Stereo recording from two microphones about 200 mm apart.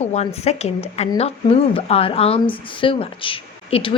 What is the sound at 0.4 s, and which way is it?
Speech, 30° left (ahead or behind).